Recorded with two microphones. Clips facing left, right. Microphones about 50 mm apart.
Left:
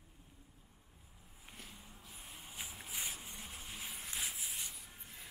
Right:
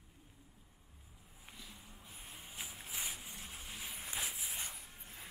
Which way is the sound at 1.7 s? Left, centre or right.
Centre.